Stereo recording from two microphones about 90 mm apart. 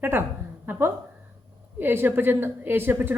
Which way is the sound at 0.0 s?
25° right (ahead or behind).